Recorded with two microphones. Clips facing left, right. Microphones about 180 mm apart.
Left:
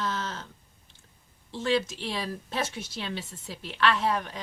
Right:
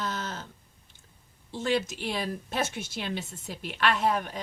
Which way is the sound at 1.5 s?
15° right (ahead or behind).